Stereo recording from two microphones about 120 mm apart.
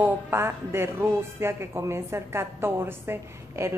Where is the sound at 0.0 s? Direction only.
20° right (ahead or behind).